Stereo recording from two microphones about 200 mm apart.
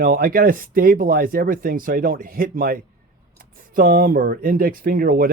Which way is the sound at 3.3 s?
45° right (ahead or behind).